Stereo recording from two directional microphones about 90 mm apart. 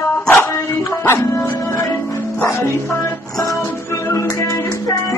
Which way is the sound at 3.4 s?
40° left (ahead or behind).